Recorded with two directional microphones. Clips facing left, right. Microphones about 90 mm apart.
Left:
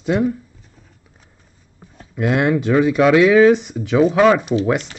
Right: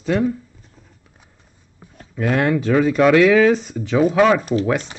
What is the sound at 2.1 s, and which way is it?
Speech, 15° left (ahead or behind).